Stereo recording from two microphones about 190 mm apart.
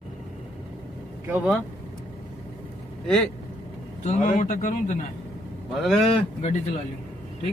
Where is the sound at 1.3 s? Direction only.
5° right (ahead or behind).